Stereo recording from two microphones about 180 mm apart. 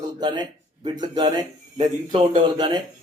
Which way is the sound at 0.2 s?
25° right (ahead or behind).